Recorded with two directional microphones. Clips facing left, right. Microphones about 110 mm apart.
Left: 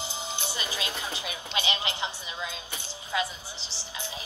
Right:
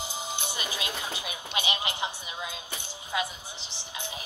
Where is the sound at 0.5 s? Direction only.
15° right (ahead or behind).